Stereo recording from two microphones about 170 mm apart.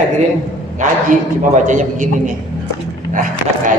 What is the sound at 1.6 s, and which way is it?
A woman's voice, 45° right (ahead or behind).